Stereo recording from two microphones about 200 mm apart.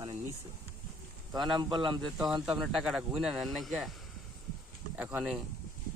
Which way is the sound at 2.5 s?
Centre (ahead or behind).